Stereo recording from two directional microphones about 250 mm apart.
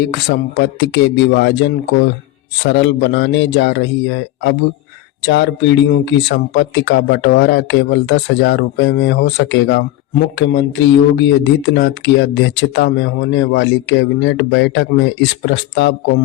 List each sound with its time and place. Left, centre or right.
0.0 s speech: left